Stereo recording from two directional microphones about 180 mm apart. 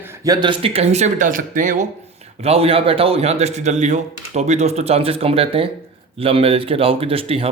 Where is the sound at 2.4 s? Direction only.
35° right (ahead or behind).